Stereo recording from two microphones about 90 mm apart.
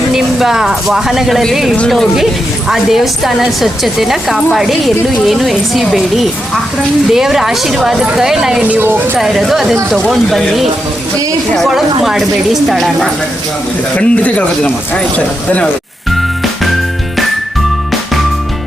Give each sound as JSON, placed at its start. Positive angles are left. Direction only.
{"t": 0.1, "sound": "a woman's voice", "side_deg": -5}
{"t": 8.6, "sound": "speech", "side_deg": -20}
{"t": 9.1, "sound": "a woman's voice", "side_deg": 0}
{"t": 13.9, "sound": "speech", "side_deg": 15}